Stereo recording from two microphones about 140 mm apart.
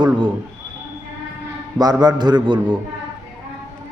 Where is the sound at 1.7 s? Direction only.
30° right (ahead or behind).